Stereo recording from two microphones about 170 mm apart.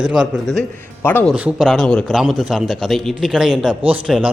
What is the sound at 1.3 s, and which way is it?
A man's voice, 5° right (ahead or behind).